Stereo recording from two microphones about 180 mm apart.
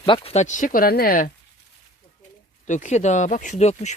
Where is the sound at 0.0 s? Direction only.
30° left (ahead or behind); by 1.3 s 55° left (ahead or behind).